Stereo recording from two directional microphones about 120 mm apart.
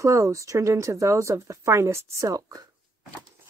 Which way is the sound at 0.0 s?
25° right (ahead or behind).